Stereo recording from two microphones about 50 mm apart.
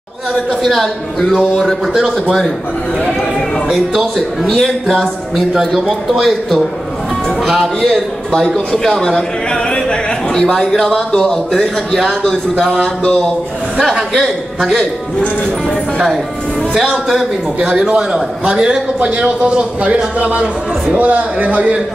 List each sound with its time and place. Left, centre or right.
0.5 s a man's voice: centre
1.3 s a man's voice: centre
3.7 s a man's voice: centre
7.8 s a man's voice: centre
14.6 s a man's voice: centre
16.9 s a man's voice: centre
17.6 s a man's voice: centre